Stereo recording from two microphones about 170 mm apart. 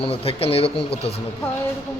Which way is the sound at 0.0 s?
35° left (ahead or behind).